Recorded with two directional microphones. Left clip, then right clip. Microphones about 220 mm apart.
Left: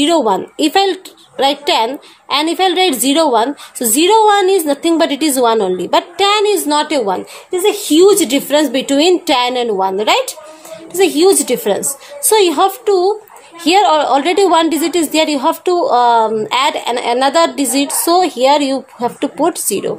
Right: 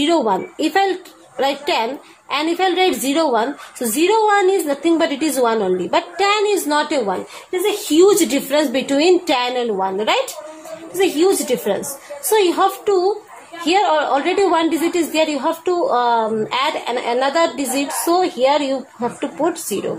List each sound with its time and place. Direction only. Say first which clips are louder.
0.0 s a woman's voice: left 4 dB; 40° left (ahead or behind)